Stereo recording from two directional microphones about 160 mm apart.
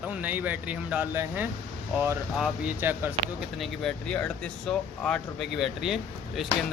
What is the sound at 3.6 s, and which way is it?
Speech, 5° left (ahead or behind).